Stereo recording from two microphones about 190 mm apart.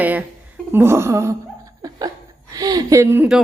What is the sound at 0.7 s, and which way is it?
Laughter, 10° right (ahead or behind).